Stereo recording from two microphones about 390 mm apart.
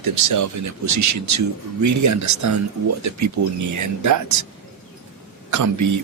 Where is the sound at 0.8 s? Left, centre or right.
Right.